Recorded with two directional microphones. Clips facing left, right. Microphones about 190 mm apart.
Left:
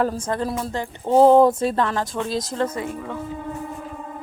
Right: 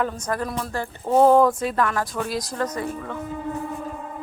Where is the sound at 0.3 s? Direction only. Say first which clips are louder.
Left 2 dB; 25° left (ahead or behind).